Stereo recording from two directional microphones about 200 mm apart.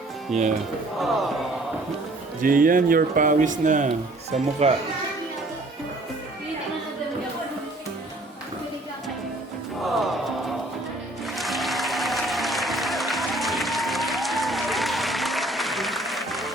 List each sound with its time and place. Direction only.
0.3 s crowd: centre (ahead or behind)
2.4 s speech: 45° right (ahead or behind)
9.8 s music: centre (ahead or behind)
11.3 s applause: centre (ahead or behind)